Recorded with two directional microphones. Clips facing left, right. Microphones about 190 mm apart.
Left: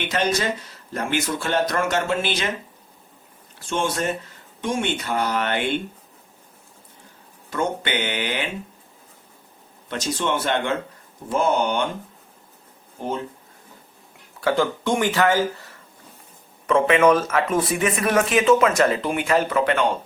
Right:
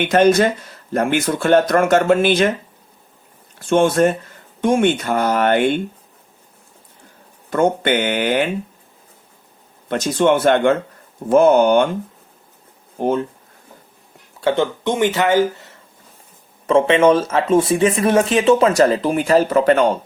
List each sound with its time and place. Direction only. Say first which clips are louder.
0.0 s speech: right 10 dB; 55° right (ahead or behind)
3.7 s speech: right 10 dB; 55° right (ahead or behind)
7.5 s speech: right 8 dB; 55° right (ahead or behind)
9.9 s speech: right 9 dB; 55° right (ahead or behind)
14.4 s speech: right 3 dB; 25° right (ahead or behind); by 19.9 s 40° right (ahead or behind)